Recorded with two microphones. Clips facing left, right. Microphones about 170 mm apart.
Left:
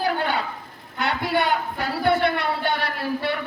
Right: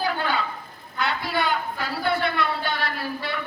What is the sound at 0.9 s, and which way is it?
A woman's voice, 60° left (ahead or behind).